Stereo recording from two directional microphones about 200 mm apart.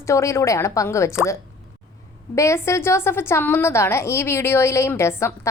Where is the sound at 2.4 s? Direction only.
15° left (ahead or behind).